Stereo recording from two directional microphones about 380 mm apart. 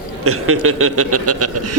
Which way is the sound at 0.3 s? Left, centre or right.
Right.